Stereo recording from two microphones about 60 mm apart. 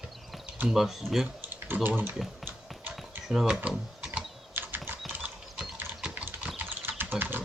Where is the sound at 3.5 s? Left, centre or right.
Centre.